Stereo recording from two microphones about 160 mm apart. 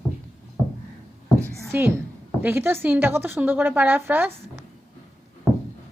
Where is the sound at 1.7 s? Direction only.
15° right (ahead or behind).